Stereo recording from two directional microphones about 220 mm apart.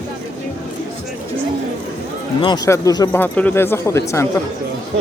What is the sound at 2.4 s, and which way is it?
Speech, 20° left (ahead or behind).